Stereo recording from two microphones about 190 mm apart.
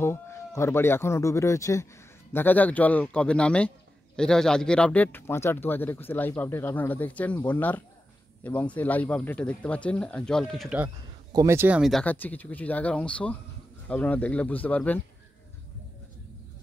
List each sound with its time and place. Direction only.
0.0 s speech: 15° left (ahead or behind); by 10.9 s 5° right (ahead or behind)
11.3 s speech: 15° right (ahead or behind); by 15.0 s 10° left (ahead or behind)